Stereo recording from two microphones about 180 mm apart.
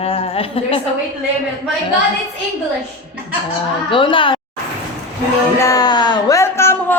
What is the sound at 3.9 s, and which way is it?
Speech, 30° left (ahead or behind).